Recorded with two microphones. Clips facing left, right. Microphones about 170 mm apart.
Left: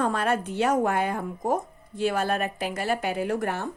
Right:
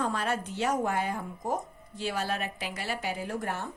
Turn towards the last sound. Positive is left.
turn(degrees=70)  # may be behind; listen again after turning